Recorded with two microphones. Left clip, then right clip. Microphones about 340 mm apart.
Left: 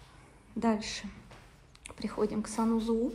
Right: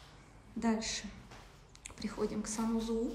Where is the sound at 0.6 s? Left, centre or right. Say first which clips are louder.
Left 4 dB; centre.